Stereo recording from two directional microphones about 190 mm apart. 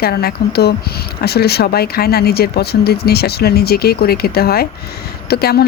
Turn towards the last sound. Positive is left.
turn(degrees=55)  # may be behind; listen again after turning